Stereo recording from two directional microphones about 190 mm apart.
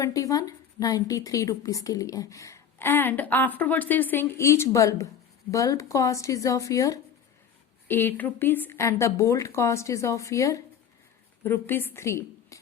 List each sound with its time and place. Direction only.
0.0 s a woman's voice: 15° left (ahead or behind)